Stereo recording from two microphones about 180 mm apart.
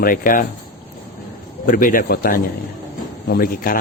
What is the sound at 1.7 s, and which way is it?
A man's voice, 50° left (ahead or behind).